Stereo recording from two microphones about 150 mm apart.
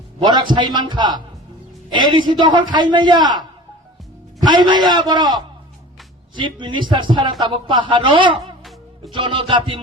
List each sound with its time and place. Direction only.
0.2 s a man's voice: 30° right (ahead or behind)